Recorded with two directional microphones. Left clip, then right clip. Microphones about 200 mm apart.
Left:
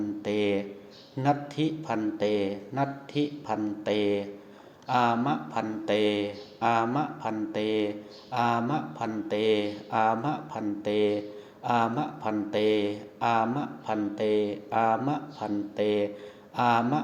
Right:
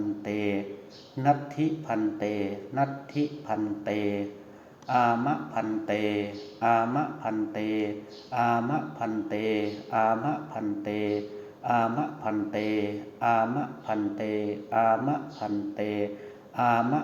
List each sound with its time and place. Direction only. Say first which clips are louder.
0.3 s a sound: left 4 dB; 50° left (ahead or behind)
1.2 s speech: right 2 dB; 40° left (ahead or behind); by 5.3 s 55° left (ahead or behind)
5.3 s speech: right 1 dB; 45° left (ahead or behind)
8.4 s speech: right 1 dB; 60° left (ahead or behind)